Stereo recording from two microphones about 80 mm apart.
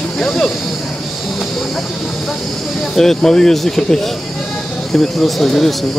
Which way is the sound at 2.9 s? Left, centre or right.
Centre.